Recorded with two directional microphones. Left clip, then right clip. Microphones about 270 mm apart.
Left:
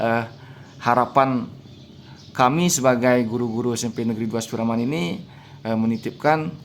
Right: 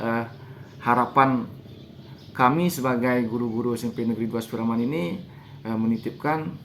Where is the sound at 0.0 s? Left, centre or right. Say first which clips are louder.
Left 5 dB; left.